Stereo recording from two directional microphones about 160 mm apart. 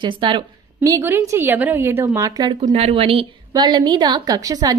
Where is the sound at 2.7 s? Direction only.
45° right (ahead or behind).